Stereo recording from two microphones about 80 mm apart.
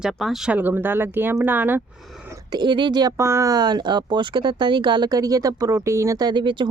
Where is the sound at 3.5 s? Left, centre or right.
Right.